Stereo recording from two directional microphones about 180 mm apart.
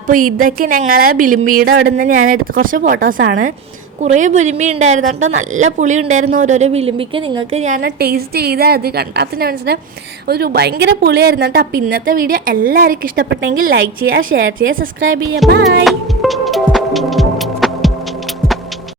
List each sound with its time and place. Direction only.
0.1 s a woman's voice: 50° right (ahead or behind)
7.8 s a woman's voice: 60° right (ahead or behind)
13.6 s a woman's voice: 90° right
15.4 s music: centre (ahead or behind)